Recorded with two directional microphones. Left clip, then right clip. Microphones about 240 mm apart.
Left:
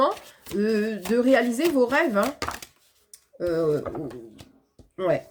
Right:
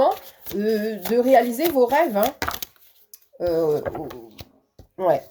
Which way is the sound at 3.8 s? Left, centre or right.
Right.